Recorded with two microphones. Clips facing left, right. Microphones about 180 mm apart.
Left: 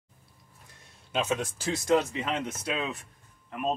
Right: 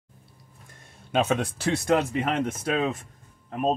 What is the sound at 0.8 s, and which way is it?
Speech, 60° right (ahead or behind).